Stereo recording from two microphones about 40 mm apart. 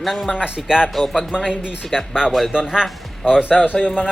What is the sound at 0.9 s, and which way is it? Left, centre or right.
Speech, centre.